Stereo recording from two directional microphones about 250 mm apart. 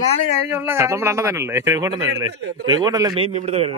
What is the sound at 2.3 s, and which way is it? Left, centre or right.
Speech, right.